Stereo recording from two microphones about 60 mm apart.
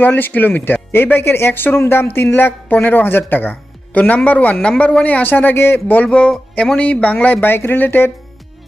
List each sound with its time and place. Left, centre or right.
0.0 s speech: left